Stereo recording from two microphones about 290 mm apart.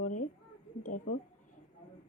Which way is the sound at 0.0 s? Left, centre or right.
Left.